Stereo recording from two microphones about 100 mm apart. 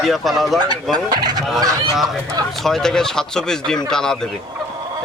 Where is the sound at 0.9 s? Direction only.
45° right (ahead or behind).